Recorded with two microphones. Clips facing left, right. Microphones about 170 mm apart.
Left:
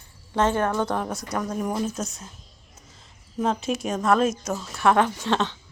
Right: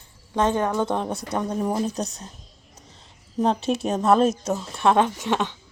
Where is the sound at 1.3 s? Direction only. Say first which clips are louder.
Right 2 dB; 30° right (ahead or behind).